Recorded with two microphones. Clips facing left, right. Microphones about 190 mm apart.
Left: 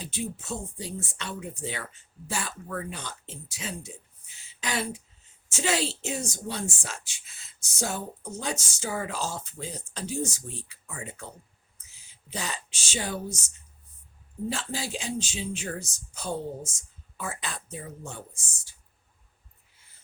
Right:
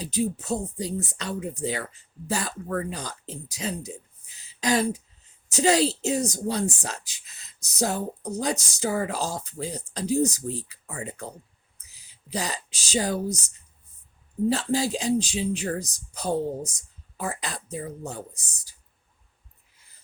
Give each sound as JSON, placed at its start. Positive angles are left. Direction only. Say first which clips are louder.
{"t": 0.0, "sound": "speech", "louder": "right 8 dB", "side_deg": -40}
{"t": 4.4, "sound": "a sound", "louder": "right 8 dB", "side_deg": -40}
{"t": 5.5, "sound": "speech", "louder": "right 7 dB", "side_deg": -40}
{"t": 14.5, "sound": "speech", "louder": "right 9 dB", "side_deg": -40}